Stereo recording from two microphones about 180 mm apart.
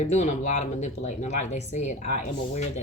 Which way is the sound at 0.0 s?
40° left (ahead or behind).